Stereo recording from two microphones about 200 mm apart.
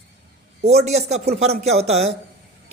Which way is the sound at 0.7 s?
30° right (ahead or behind).